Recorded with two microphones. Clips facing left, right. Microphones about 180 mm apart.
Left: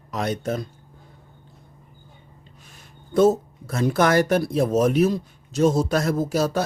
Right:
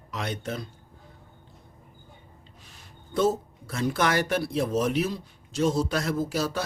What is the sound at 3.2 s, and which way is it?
Speech, 45° left (ahead or behind).